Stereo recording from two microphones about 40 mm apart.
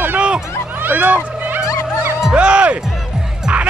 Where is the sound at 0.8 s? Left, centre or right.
Right.